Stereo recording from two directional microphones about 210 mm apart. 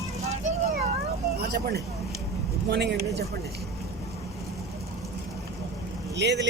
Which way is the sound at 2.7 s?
55° right (ahead or behind).